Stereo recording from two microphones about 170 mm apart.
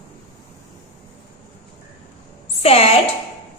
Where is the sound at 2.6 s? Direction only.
35° left (ahead or behind).